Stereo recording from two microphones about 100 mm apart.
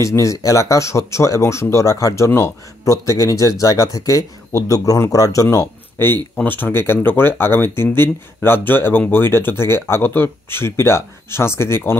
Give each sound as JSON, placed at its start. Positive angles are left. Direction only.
{"t": 0.0, "sound": "speech", "side_deg": 30}